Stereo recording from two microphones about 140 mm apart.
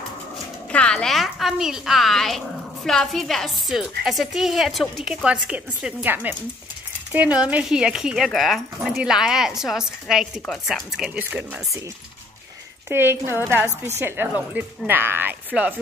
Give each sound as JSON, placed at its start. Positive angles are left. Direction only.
{"t": 0.7, "sound": "a woman's voice", "side_deg": 10}
{"t": 12.8, "sound": "speech", "side_deg": -15}